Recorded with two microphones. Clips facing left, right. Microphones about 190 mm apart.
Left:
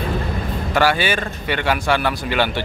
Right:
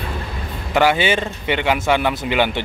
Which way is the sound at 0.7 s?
20° right (ahead or behind).